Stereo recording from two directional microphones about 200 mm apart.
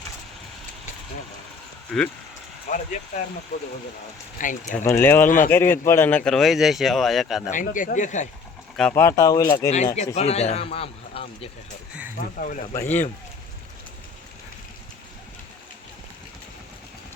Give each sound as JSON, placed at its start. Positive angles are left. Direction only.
{"t": 2.7, "sound": "speech", "side_deg": 40}
{"t": 4.4, "sound": "a man's voice", "side_deg": 40}
{"t": 4.8, "sound": "speech", "side_deg": 10}
{"t": 7.5, "sound": "a man's voice", "side_deg": 40}
{"t": 8.7, "sound": "speech", "side_deg": 5}
{"t": 9.6, "sound": "a man's voice", "side_deg": 35}
{"t": 12.1, "sound": "a man's voice", "side_deg": 40}
{"t": 12.7, "sound": "speech", "side_deg": 10}